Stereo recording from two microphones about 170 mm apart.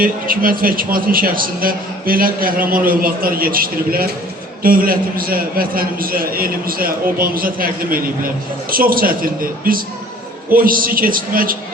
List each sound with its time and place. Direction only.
0.0 s a man's voice: 55° right (ahead or behind)